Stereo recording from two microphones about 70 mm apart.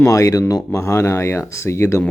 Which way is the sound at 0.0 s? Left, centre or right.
Left.